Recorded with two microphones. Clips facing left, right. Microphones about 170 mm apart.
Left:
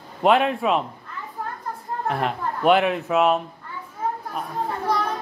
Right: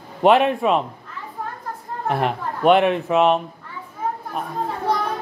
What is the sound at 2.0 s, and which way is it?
Speech, 5° right (ahead or behind).